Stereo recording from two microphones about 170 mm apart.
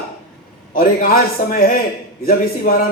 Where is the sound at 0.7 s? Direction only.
55° left (ahead or behind).